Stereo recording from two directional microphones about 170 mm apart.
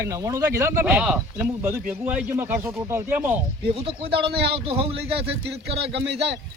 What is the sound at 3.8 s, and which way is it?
Speech, 35° right (ahead or behind).